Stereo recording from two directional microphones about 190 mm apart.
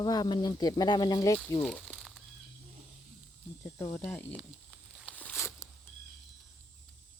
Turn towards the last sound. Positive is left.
turn(degrees=15)  # may be behind; listen again after turning